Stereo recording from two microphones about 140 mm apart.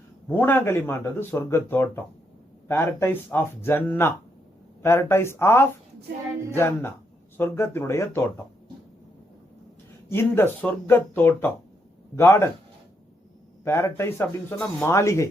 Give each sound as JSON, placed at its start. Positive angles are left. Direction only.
{"t": 0.3, "sound": "speech", "side_deg": 15}
{"t": 10.1, "sound": "speech", "side_deg": 15}
{"t": 13.7, "sound": "speech", "side_deg": 20}